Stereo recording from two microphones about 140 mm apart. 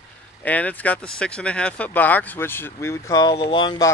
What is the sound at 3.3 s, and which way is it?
Speech, 40° left (ahead or behind).